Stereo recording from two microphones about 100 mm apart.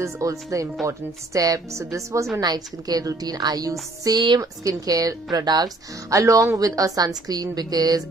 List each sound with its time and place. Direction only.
0.0 s speech: 35° right (ahead or behind)
4.4 s speech: 35° right (ahead or behind)